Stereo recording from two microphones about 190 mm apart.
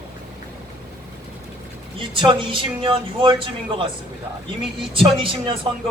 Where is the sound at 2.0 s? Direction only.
25° right (ahead or behind).